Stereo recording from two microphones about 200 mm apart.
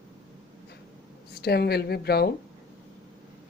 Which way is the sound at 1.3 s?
55° left (ahead or behind).